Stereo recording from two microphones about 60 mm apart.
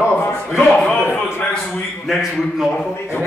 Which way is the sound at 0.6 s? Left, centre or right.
Centre.